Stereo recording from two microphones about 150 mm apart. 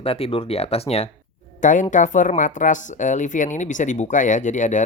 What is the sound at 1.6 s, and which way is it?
Speech, 55° left (ahead or behind).